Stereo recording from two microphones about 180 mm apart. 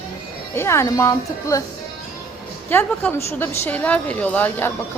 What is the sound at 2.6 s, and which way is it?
A woman's voice, 10° left (ahead or behind).